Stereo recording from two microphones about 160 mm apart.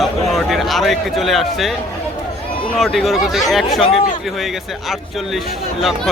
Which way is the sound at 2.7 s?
Centre (ahead or behind).